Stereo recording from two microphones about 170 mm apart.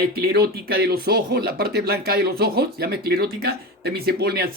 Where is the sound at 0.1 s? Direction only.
70° right (ahead or behind).